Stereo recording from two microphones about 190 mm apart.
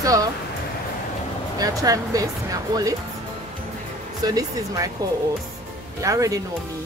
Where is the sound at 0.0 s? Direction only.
20° right (ahead or behind).